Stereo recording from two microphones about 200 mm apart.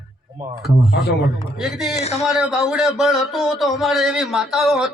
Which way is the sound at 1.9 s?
35° left (ahead or behind).